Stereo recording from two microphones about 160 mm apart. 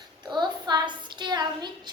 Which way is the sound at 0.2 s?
25° right (ahead or behind).